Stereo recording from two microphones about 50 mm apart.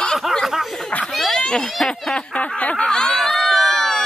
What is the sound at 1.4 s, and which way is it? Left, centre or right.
Speech, centre.